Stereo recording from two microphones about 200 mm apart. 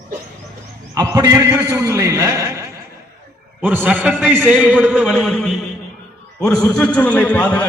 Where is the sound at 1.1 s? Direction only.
15° right (ahead or behind).